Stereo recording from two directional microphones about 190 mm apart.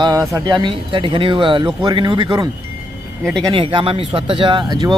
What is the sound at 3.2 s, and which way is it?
Speech, centre (ahead or behind).